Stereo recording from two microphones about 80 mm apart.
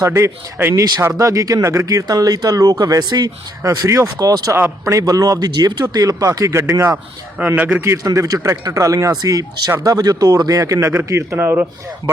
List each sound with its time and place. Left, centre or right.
0.0 s speech: right
5.8 s speech: right
7.3 s a man's voice: centre
8.0 s speech: right
10.9 s a man's voice: right